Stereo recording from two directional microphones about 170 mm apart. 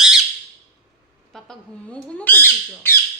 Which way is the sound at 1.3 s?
5° left (ahead or behind).